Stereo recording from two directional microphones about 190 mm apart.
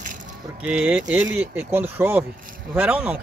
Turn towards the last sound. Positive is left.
turn(degrees=-10)  # may be behind; listen again after turning